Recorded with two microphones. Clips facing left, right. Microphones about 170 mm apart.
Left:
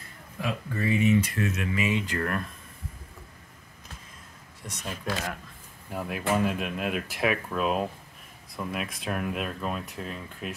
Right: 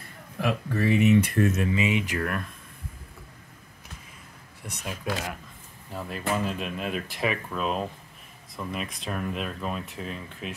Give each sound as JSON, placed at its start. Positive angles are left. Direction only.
{"t": 0.4, "sound": "speech", "side_deg": -65}
{"t": 1.7, "sound": "speech", "side_deg": -20}
{"t": 2.1, "sound": "speech", "side_deg": -5}
{"t": 4.6, "sound": "speech", "side_deg": -10}
{"t": 5.9, "sound": "speech", "side_deg": 10}